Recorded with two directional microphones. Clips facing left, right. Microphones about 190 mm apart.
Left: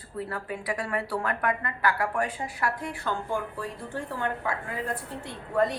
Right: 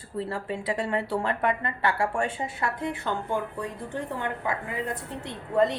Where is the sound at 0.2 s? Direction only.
25° right (ahead or behind).